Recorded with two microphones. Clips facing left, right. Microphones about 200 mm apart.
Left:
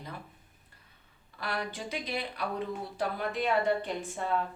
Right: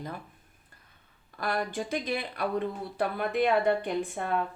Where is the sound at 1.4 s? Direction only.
45° right (ahead or behind).